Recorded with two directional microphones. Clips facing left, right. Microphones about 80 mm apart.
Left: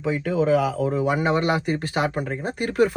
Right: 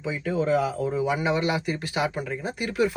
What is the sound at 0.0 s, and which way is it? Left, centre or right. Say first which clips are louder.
Speech: left 4 dB; left.